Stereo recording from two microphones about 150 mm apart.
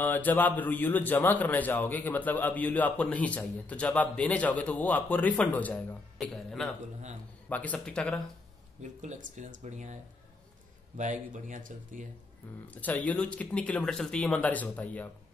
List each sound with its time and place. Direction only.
0.0 s a man's voice: 10° left (ahead or behind)
9.0 s speech: 55° right (ahead or behind)
11.0 s speech: 55° right (ahead or behind)
12.7 s a man's voice: 10° left (ahead or behind)